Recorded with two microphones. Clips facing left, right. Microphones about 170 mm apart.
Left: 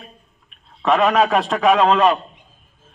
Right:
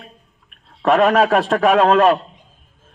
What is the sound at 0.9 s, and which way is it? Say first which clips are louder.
A man's voice: right 2 dB; 50° right (ahead or behind).